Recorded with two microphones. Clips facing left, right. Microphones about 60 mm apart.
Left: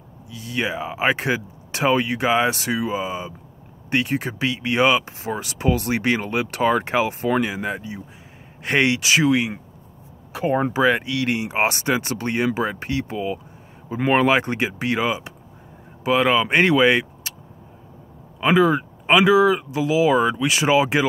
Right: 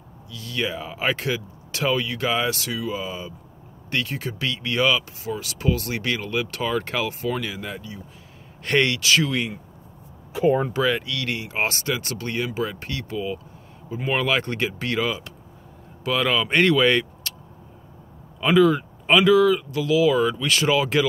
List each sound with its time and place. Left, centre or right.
0.3 s speech: left
8.6 s speech: centre
10.7 s speech: left
18.5 s speech: left